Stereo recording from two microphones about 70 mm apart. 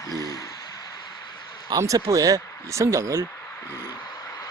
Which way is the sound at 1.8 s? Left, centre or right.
Right.